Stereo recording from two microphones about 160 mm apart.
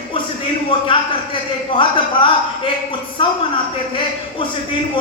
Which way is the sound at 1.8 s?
30° left (ahead or behind).